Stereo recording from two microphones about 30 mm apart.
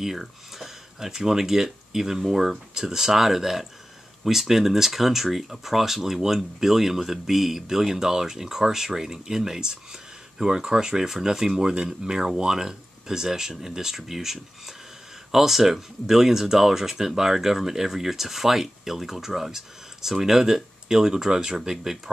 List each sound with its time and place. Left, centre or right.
0.0 s speech: centre